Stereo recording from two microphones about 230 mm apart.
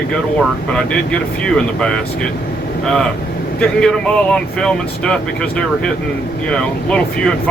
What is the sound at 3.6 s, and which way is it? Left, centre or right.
Speech, centre.